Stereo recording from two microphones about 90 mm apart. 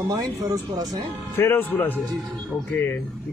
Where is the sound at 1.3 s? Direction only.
20° left (ahead or behind).